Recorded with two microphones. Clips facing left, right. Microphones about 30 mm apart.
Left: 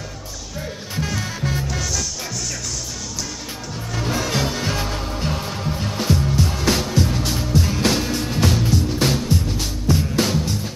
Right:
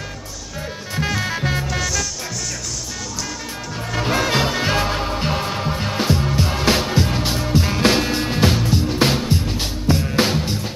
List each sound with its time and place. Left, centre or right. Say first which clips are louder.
0.6 s music: right 2 dB; right
1.7 s music: right 3 dB; centre
3.9 s music: right 4 dB; right